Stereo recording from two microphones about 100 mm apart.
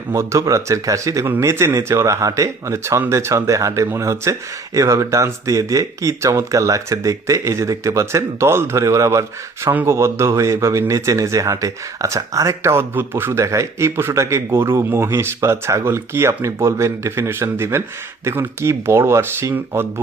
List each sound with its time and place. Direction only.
0.1 s speech: 30° right (ahead or behind)